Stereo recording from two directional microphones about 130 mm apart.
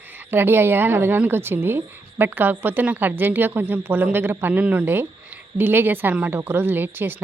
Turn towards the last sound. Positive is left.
turn(degrees=-15)  # may be behind; listen again after turning